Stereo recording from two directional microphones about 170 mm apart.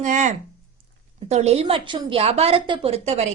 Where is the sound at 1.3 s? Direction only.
40° right (ahead or behind).